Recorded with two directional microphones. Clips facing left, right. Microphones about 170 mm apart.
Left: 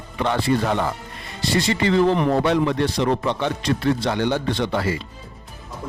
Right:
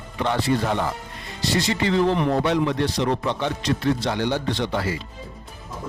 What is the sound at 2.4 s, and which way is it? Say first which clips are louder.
Speech: left 2 dB; 55° left (ahead or behind).